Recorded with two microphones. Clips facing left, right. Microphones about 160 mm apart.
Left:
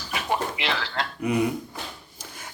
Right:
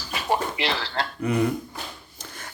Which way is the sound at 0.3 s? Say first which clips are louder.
Right 2 dB; 35° right (ahead or behind).